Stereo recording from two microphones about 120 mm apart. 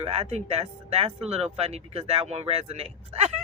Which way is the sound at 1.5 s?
60° right (ahead or behind).